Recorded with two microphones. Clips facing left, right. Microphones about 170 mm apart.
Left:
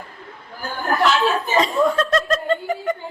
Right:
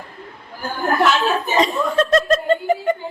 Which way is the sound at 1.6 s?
20° right (ahead or behind).